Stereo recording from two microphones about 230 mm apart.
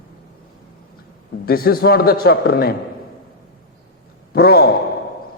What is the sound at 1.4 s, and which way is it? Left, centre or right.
A man's voice, left.